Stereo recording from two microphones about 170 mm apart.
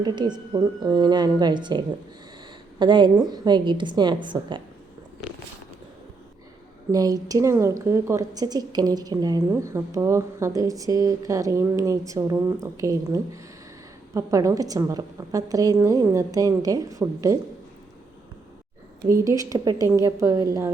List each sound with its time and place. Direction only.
0.0 s a woman's voice: 25° right (ahead or behind)
6.9 s a woman's voice: 20° right (ahead or behind)
19.0 s a woman's voice: 20° right (ahead or behind)